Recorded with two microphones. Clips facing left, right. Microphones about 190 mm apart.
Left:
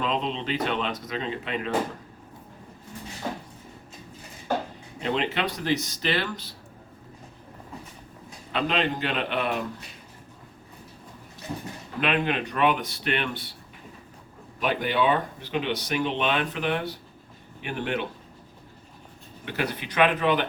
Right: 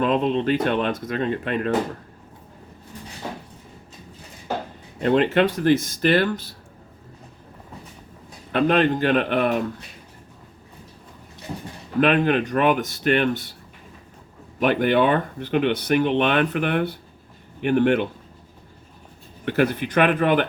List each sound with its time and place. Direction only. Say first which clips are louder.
0.0 s speech: right 8 dB; 55° right (ahead or behind)
5.0 s speech: right 9 dB; 50° right (ahead or behind)
8.5 s speech: right 7 dB; 55° right (ahead or behind)
11.9 s speech: right 8 dB; 45° right (ahead or behind)
14.6 s speech: right 6 dB; 55° right (ahead or behind)
19.5 s speech: right 9 dB; 50° right (ahead or behind)